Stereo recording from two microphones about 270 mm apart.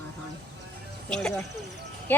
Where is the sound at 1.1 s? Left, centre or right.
Centre.